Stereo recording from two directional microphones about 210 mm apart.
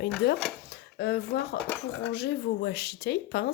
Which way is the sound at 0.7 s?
50° left (ahead or behind).